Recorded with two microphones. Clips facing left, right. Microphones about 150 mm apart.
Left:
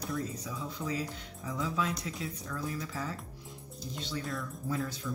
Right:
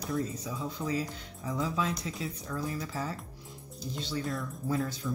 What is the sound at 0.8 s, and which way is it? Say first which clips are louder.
A woman's voice: right 2 dB; 30° right (ahead or behind).